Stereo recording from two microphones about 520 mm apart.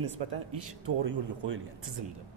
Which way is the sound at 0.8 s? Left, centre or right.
Right.